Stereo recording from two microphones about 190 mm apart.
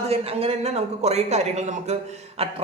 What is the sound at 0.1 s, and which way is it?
Speech, 30° right (ahead or behind).